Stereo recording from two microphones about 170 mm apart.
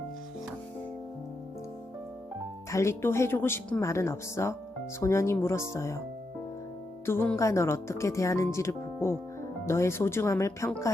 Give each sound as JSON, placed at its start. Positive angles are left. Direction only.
{"t": 2.6, "sound": "speech", "side_deg": 15}
{"t": 7.0, "sound": "speech", "side_deg": 15}